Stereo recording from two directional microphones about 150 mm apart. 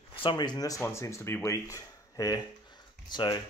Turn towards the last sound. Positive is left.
turn(degrees=30)  # may be behind; listen again after turning